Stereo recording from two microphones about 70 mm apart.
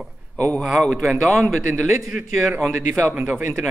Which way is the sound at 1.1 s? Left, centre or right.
Right.